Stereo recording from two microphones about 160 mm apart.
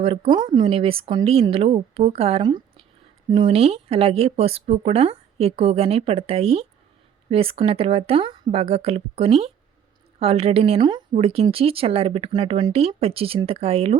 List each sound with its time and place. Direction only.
0.0 s speech: 35° right (ahead or behind)